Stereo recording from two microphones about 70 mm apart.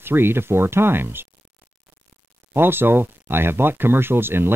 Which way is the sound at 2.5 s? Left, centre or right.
Right.